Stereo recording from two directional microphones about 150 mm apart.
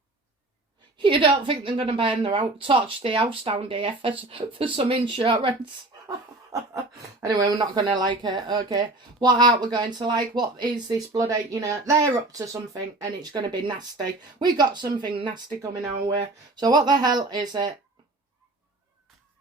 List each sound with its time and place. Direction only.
0.9 s a woman's voice: 35° right (ahead or behind)
7.2 s speech: 25° right (ahead or behind)
16.6 s speech: 25° right (ahead or behind)